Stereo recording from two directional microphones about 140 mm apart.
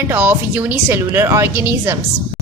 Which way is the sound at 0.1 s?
10° right (ahead or behind).